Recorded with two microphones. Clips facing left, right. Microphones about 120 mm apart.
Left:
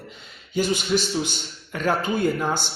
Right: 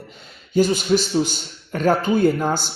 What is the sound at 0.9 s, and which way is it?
A man's voice, 45° right (ahead or behind).